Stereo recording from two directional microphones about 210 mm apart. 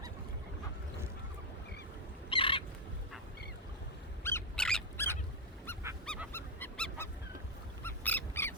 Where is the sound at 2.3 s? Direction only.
25° left (ahead or behind).